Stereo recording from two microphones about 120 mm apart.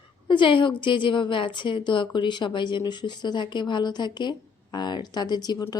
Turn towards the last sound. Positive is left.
turn(degrees=35)  # may be behind; listen again after turning